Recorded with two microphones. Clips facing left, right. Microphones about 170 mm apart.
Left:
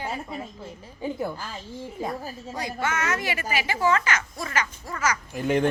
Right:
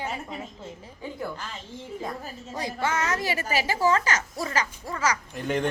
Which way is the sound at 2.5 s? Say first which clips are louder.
Right 1 dB; 30° right (ahead or behind).